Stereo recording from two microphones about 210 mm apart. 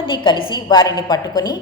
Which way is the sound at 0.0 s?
25° left (ahead or behind).